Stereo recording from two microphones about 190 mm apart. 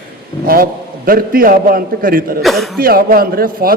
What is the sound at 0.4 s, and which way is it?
A man's voice, 50° right (ahead or behind).